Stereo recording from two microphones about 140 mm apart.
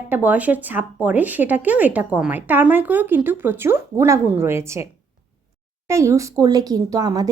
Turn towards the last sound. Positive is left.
turn(degrees=-25)  # may be behind; listen again after turning